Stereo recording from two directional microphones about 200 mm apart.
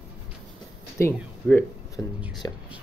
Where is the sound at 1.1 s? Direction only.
5° left (ahead or behind).